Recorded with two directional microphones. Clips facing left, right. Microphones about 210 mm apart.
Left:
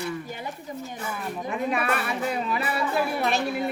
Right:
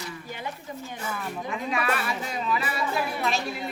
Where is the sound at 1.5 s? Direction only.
55° left (ahead or behind).